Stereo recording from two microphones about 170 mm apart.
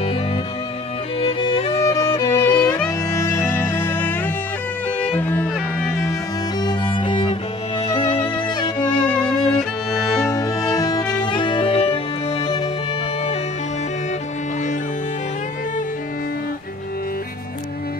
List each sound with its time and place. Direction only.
1.2 s music: 30° left (ahead or behind)
3.1 s music: 15° left (ahead or behind)
6.6 s music: 25° left (ahead or behind)